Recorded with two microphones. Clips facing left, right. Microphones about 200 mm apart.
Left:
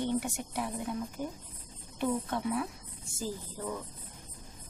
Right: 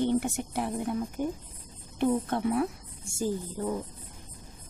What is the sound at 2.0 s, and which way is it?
Speech, 50° right (ahead or behind).